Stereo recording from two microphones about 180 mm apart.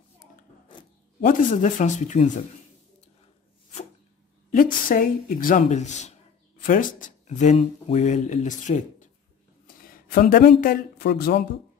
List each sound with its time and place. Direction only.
1.2 s speech: 45° left (ahead or behind)
4.5 s speech: 50° left (ahead or behind)